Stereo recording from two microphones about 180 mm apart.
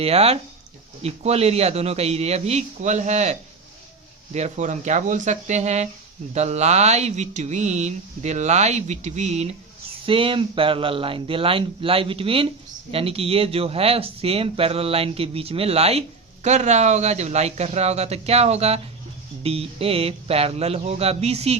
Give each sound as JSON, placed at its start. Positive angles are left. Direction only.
{"t": 0.0, "sound": "speech", "side_deg": -35}
{"t": 4.4, "sound": "speech", "side_deg": -40}